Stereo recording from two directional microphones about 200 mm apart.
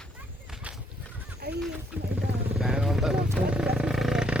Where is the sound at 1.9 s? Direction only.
5° right (ahead or behind).